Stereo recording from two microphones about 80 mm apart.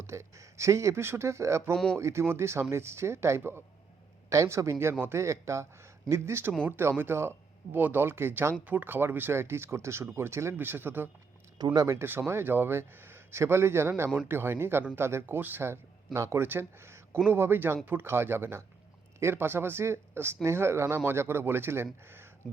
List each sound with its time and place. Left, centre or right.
0.0 s speech: right
1.7 s speech: centre
2.0 s speech: right
11.5 s speech: right
11.9 s speech: right